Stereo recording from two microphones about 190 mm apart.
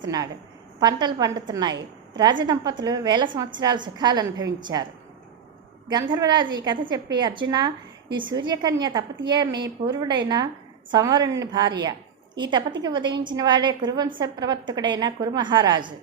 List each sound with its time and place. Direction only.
0.8 s a woman's voice: 20° right (ahead or behind)
5.9 s a woman's voice: 20° right (ahead or behind)